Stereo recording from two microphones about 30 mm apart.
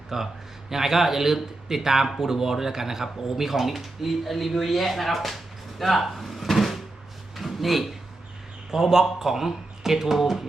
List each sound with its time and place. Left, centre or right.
0.1 s speech: centre
7.3 s a sound: centre
8.7 s speech: centre